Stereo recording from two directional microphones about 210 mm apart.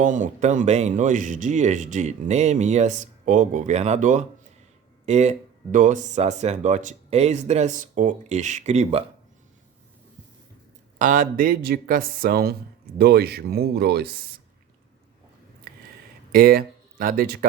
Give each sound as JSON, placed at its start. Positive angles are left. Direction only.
{"t": 0.0, "sound": "speech", "side_deg": -40}
{"t": 10.9, "sound": "speech", "side_deg": -40}
{"t": 15.7, "sound": "a sound", "side_deg": -45}
{"t": 16.3, "sound": "speech", "side_deg": -45}